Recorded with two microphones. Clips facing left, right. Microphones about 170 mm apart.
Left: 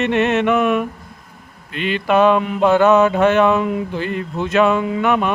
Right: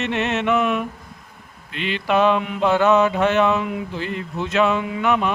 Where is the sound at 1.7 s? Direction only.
50° left (ahead or behind).